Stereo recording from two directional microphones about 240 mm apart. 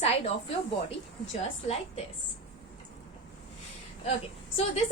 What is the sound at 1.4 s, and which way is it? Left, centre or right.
Speech, left.